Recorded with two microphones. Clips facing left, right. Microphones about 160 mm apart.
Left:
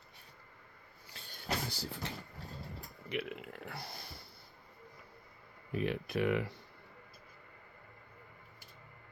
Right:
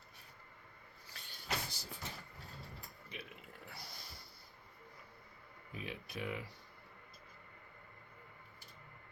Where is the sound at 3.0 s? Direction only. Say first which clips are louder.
Left 14 dB; 75° left (ahead or behind); by 3.9 s 60° left (ahead or behind).